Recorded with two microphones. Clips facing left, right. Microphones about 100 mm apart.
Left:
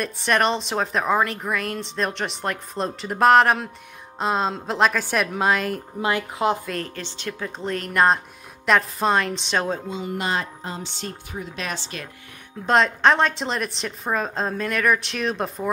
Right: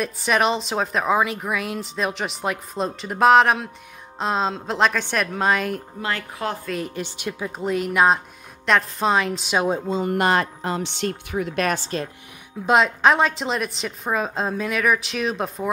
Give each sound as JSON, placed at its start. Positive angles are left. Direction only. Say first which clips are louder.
{"t": 0.0, "sound": "a woman's voice", "louder": "right 1 dB", "side_deg": 0}
{"t": 5.9, "sound": "speech", "louder": "left 4 dB", "side_deg": 20}
{"t": 6.7, "sound": "a woman's voice", "louder": "right 2 dB", "side_deg": -10}
{"t": 10.0, "sound": "speech", "louder": "right 6 dB", "side_deg": -60}
{"t": 12.6, "sound": "a woman's voice", "louder": "right 1 dB", "side_deg": -5}